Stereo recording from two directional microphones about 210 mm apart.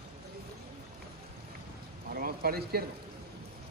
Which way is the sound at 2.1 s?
45° right (ahead or behind).